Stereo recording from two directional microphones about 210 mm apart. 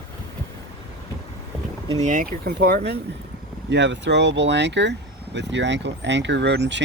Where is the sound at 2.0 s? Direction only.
40° right (ahead or behind).